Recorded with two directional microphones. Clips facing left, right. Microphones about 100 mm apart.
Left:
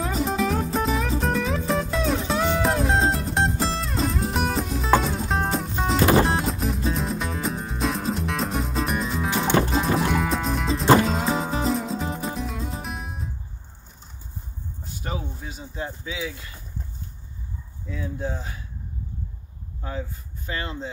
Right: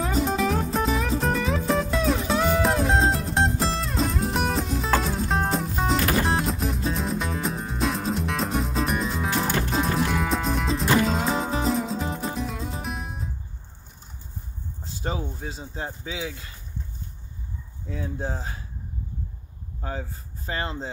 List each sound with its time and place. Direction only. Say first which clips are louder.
0.0 s music: even; centre (ahead or behind)
5.9 s music: left 8 dB; 30° left (ahead or behind)
6.2 s music: left 1 dB; centre (ahead or behind)
15.0 s a sound: right 2 dB; 30° right (ahead or behind)
16.0 s speech: left 1 dB; 30° right (ahead or behind)
17.8 s speech: left 1 dB; 40° right (ahead or behind)
19.8 s speech: even; 35° right (ahead or behind)